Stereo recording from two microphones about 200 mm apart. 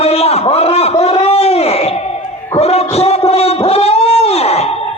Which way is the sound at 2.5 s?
30° left (ahead or behind).